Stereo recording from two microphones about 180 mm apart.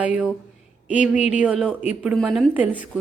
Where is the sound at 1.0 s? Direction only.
40° left (ahead or behind).